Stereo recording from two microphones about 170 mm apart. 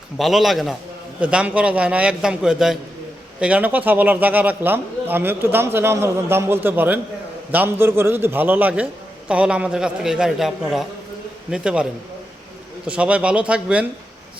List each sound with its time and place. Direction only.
0.2 s a man's voice: centre (ahead or behind)
12.9 s a man's voice: 5° right (ahead or behind)